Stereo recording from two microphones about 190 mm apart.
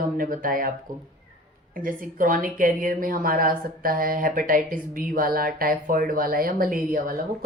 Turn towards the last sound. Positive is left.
turn(degrees=-50)  # may be behind; listen again after turning